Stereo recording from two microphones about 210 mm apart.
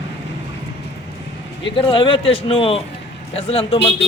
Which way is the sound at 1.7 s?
25° left (ahead or behind).